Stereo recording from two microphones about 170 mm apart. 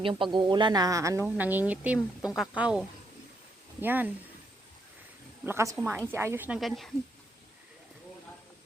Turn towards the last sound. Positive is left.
turn(degrees=0)  # may be behind; listen again after turning